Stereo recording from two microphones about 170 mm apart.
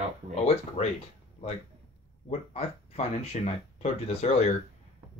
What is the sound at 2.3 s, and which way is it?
Speech, 40° left (ahead or behind).